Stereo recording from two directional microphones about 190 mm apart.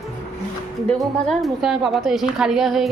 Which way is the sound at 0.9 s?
Centre (ahead or behind).